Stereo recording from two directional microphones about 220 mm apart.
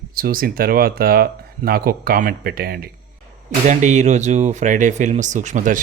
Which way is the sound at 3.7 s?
35° right (ahead or behind).